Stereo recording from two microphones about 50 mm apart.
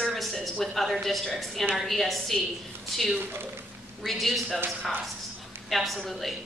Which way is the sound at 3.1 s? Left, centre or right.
Right.